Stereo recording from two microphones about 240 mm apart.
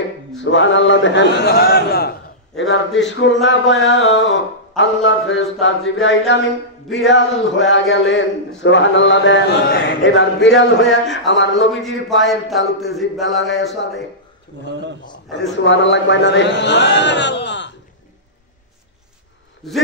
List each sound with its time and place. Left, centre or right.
0.4 s a man's voice: left
11.7 s speech: centre
15.5 s a man's voice: left
19.6 s speech: centre